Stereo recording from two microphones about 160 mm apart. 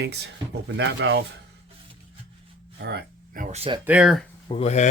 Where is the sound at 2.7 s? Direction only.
85° right.